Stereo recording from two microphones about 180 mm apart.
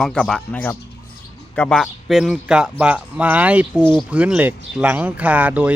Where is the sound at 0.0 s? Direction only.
Centre (ahead or behind).